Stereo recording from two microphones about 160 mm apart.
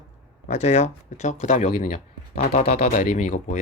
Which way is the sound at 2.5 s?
50° left (ahead or behind).